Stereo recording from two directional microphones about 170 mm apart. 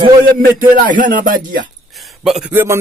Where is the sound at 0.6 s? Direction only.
50° right (ahead or behind).